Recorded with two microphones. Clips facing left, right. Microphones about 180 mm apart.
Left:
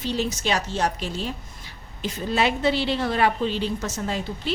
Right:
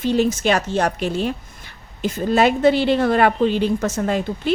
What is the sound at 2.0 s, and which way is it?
A woman's voice, 50° right (ahead or behind).